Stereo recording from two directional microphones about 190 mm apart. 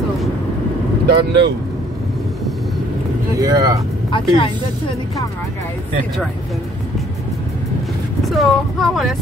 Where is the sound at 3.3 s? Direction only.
20° right (ahead or behind).